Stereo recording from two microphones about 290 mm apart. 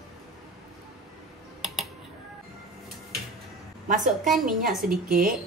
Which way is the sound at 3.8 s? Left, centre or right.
Right.